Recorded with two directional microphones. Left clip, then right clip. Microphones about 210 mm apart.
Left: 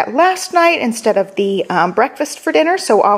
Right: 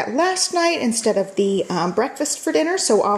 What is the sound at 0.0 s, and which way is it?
A woman's voice, 10° left (ahead or behind).